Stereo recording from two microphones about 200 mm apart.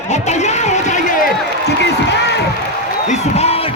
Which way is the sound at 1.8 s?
60° left (ahead or behind).